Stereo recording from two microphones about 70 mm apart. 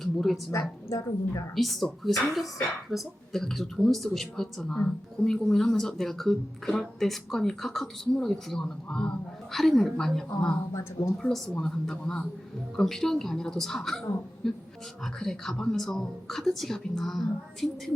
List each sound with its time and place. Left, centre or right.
0.0 s a woman's voice: centre
0.9 s a woman's voice: left
1.5 s speech: centre
4.7 s a woman's voice: centre
5.3 s a woman's voice: centre